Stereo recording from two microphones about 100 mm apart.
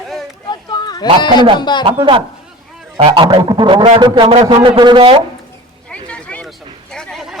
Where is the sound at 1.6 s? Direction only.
50° left (ahead or behind).